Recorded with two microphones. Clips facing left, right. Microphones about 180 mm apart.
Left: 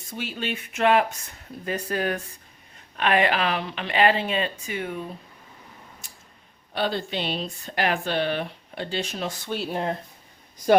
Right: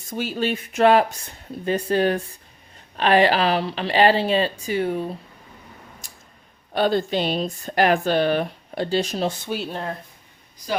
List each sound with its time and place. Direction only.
0.1 s speech: 40° right (ahead or behind)
6.0 s tick-tock: 40° right (ahead or behind)
6.7 s speech: 45° right (ahead or behind); by 9.5 s 30° right (ahead or behind)
9.6 s speech: 15° left (ahead or behind)